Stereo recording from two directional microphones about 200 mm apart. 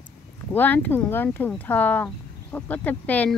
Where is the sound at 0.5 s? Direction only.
10° left (ahead or behind).